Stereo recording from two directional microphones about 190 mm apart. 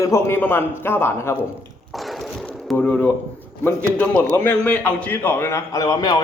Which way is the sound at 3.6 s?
10° left (ahead or behind).